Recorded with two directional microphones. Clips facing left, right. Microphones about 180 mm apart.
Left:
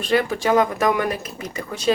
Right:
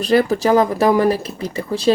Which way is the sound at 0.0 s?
35° right (ahead or behind).